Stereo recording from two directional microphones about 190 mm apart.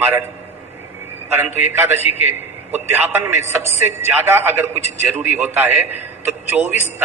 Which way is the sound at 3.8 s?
10° right (ahead or behind).